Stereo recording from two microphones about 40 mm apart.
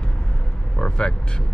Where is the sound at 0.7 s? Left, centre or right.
Left.